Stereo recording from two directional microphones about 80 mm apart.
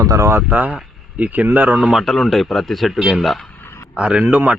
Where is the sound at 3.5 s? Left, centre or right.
Left.